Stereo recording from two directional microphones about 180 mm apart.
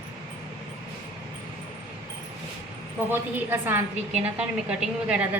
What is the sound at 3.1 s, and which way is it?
A woman's voice, 10° right (ahead or behind).